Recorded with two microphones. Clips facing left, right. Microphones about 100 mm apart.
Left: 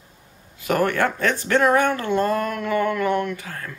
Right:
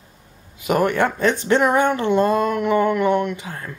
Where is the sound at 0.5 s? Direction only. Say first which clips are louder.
Right 2 dB; 20° right (ahead or behind).